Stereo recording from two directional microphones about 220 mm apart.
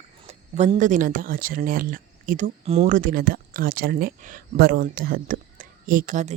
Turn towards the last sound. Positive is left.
turn(degrees=-35)  # may be behind; listen again after turning